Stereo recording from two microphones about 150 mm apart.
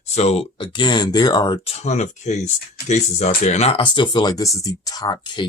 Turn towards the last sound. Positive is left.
turn(degrees=30)  # may be behind; listen again after turning